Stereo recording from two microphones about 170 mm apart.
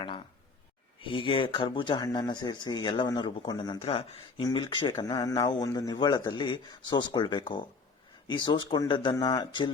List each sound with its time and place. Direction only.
1.0 s speech: 30° left (ahead or behind)